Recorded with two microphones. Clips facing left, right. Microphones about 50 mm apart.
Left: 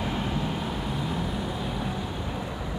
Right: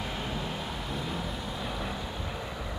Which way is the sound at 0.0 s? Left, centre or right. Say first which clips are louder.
Left 5 dB; centre.